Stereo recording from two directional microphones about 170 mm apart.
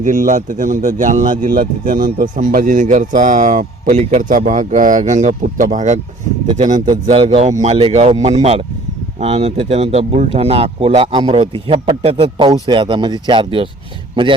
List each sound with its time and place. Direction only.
0.0 s speech: 50° right (ahead or behind)
6.8 s speech: 30° right (ahead or behind)